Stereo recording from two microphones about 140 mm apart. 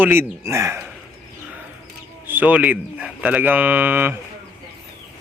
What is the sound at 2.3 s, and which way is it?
Speech, 10° right (ahead or behind).